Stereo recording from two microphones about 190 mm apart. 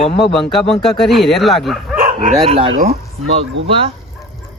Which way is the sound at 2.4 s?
30° right (ahead or behind).